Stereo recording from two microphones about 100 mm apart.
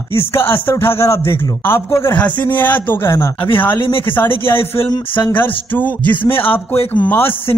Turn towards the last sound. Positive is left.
turn(degrees=20)  # may be behind; listen again after turning